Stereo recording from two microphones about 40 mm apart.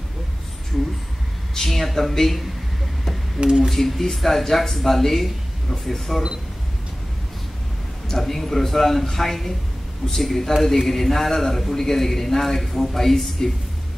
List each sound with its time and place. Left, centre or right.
1.5 s a man's voice: centre
3.3 s speech: centre
3.7 s a man's voice: centre
8.2 s a man's voice: centre